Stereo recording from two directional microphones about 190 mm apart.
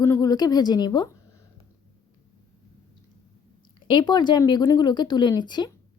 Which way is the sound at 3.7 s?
25° left (ahead or behind).